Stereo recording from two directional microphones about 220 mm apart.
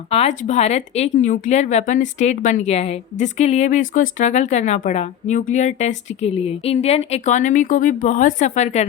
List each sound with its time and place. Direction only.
0.1 s a woman's voice: 30° left (ahead or behind)